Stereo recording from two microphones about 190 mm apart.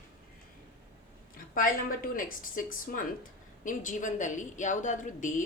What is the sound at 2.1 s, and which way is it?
Speech, 45° left (ahead or behind).